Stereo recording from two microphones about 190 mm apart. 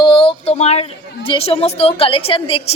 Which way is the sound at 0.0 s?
30° left (ahead or behind).